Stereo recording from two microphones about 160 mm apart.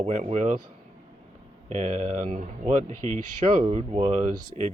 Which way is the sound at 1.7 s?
45° right (ahead or behind).